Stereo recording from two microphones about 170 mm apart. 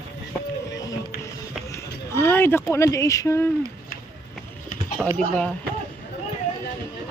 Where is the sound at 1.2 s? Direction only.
15° left (ahead or behind).